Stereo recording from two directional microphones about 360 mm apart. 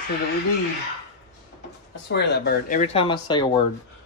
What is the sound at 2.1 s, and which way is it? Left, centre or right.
Speech, left.